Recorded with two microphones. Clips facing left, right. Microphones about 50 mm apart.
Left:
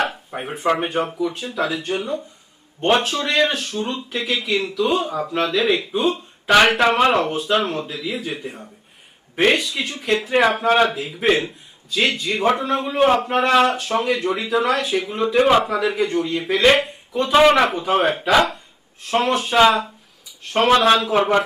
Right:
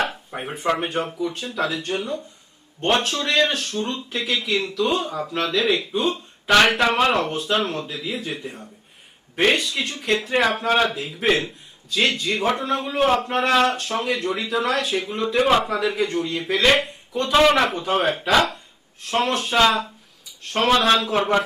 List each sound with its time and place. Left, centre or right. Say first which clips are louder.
0.0 s speech: left 2 dB; centre